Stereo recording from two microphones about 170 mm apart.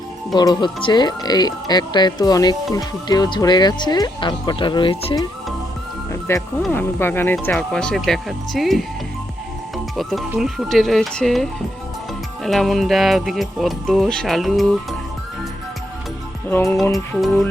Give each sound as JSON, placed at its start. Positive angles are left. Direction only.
{"t": 0.3, "sound": "speech", "side_deg": 25}
{"t": 6.1, "sound": "music", "side_deg": 15}
{"t": 6.7, "sound": "speech", "side_deg": 10}
{"t": 7.4, "sound": "music", "side_deg": 5}
{"t": 16.5, "sound": "speech", "side_deg": 10}
{"t": 16.9, "sound": "music", "side_deg": 0}